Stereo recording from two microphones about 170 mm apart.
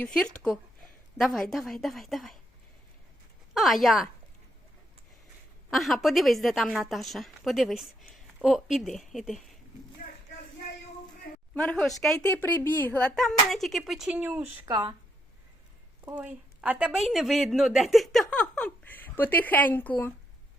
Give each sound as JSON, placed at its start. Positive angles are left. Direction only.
{"t": 0.0, "sound": "speech", "side_deg": 5}
{"t": 3.5, "sound": "speech", "side_deg": 0}
{"t": 5.7, "sound": "speech", "side_deg": 0}
{"t": 11.5, "sound": "speech", "side_deg": 5}
{"t": 14.7, "sound": "speech", "side_deg": -25}
{"t": 16.0, "sound": "speech", "side_deg": -10}